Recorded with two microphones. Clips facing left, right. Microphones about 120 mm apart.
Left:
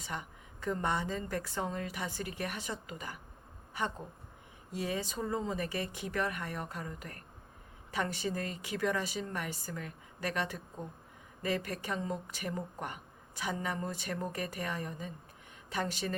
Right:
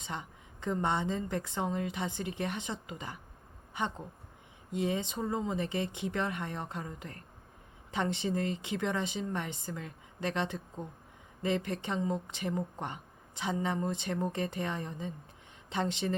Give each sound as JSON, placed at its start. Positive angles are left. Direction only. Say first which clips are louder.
{"t": 0.0, "sound": "speech", "louder": "right 1 dB", "side_deg": -25}